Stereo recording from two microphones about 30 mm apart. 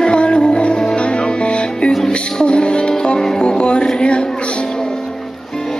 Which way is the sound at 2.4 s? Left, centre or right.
Left.